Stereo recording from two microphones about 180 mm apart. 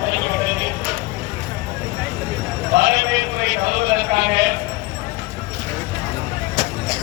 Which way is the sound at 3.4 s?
60° right (ahead or behind).